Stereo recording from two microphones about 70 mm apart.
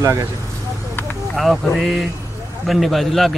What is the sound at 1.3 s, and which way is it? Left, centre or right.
A man's voice, centre.